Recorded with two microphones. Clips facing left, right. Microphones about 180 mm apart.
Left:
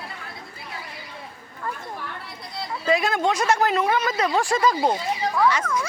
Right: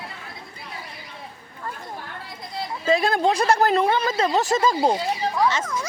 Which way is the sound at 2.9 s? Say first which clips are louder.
Right 2 dB; 30° right (ahead or behind).